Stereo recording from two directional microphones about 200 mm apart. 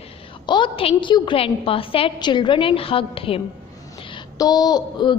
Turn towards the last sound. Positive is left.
turn(degrees=20)  # may be behind; listen again after turning